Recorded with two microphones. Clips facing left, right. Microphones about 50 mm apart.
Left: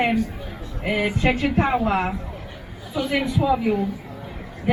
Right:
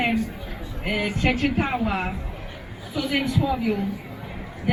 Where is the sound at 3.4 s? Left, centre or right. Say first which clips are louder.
Left 4 dB; left.